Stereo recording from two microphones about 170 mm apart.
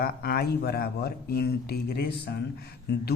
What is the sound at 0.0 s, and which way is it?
A man's voice, 65° left (ahead or behind).